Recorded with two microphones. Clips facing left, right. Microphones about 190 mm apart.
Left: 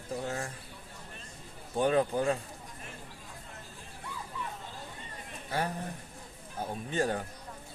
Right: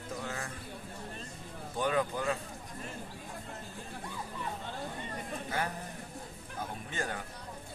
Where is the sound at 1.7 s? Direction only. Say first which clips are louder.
Left 5 dB; 30° left (ahead or behind).